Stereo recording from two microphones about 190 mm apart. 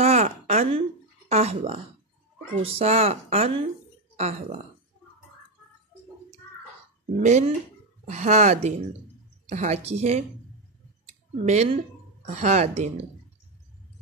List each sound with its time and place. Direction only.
0.0 s a sound: 35° right (ahead or behind)
1.3 s speech: 35° right (ahead or behind)
7.2 s speech: 40° right (ahead or behind)
11.4 s speech: 35° right (ahead or behind)